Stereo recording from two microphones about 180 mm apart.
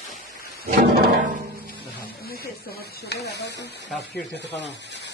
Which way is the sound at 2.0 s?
60° left (ahead or behind).